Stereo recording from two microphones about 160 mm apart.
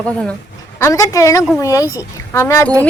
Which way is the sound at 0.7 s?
20° left (ahead or behind).